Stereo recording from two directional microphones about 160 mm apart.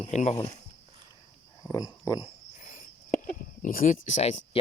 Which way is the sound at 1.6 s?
25° left (ahead or behind).